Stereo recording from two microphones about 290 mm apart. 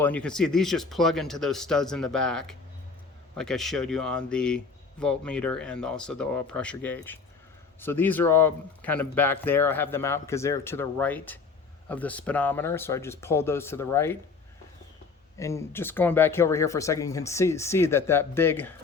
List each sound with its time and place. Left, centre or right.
0.0 s speech: centre
15.4 s speech: centre